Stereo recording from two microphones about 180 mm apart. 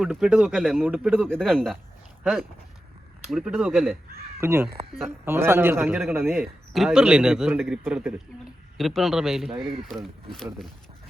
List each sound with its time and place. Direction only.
0.0 s a man's voice: 5° right (ahead or behind)
3.2 s a man's voice: 5° right (ahead or behind)
4.4 s a man's voice: 15° right (ahead or behind)
9.6 s speech: 30° right (ahead or behind)
10.3 s a man's voice: 5° left (ahead or behind)